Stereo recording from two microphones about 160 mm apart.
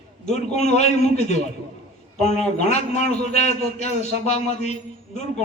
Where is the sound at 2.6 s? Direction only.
45° left (ahead or behind).